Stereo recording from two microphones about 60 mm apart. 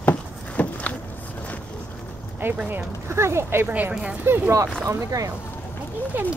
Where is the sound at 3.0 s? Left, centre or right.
Right.